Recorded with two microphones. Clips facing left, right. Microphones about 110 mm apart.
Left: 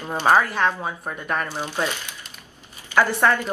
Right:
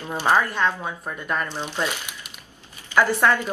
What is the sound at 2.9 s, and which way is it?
Speech, 15° left (ahead or behind).